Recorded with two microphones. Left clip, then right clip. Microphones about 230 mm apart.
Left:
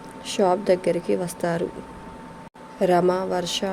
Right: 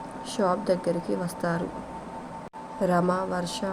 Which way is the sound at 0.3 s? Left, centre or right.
Left.